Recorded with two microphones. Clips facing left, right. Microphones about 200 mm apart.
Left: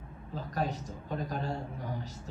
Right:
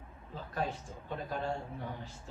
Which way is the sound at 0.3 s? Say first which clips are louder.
Left 3 dB; 40° left (ahead or behind).